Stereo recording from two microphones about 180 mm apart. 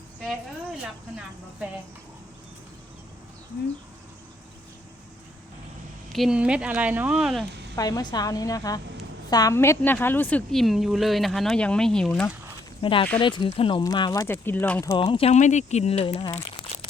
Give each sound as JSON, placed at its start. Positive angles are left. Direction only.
{"t": 6.1, "sound": "a woman's voice", "side_deg": -5}
{"t": 7.8, "sound": "a woman's voice", "side_deg": 20}
{"t": 12.8, "sound": "speech", "side_deg": 30}
{"t": 14.9, "sound": "speech", "side_deg": 30}